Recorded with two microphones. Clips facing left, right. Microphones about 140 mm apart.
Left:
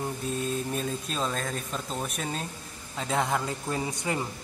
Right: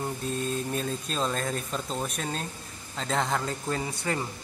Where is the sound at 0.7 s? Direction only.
5° left (ahead or behind).